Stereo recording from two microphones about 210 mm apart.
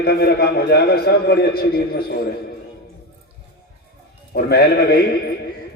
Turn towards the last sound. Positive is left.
turn(degrees=45)  # may be behind; listen again after turning